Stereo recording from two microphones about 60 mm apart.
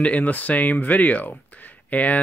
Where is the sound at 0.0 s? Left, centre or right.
Left.